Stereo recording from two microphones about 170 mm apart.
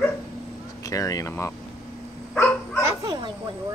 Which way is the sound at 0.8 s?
20° left (ahead or behind).